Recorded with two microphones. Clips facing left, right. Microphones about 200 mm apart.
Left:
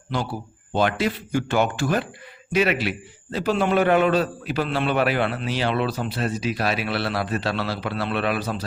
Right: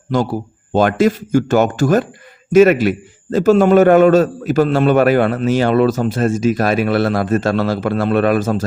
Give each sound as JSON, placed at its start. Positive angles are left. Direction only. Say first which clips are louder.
{"t": 0.1, "sound": "a man's voice", "louder": "right 10 dB", "side_deg": -45}